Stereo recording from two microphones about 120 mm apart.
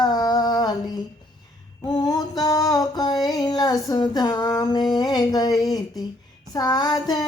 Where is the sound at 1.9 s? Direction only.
35° left (ahead or behind).